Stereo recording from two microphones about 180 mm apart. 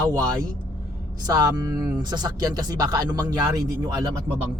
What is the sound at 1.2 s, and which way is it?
A man's voice, 20° right (ahead or behind).